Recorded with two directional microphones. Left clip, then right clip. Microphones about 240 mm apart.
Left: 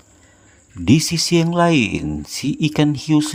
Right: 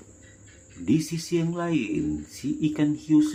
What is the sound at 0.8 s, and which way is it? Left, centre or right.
Speech, left.